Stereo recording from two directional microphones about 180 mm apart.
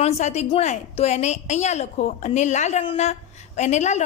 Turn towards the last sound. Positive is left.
turn(degrees=40)  # may be behind; listen again after turning